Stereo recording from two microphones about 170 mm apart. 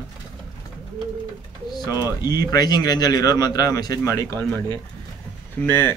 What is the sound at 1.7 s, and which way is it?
Speech, 25° left (ahead or behind).